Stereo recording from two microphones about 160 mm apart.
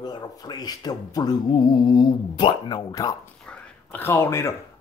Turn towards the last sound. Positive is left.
turn(degrees=15)  # may be behind; listen again after turning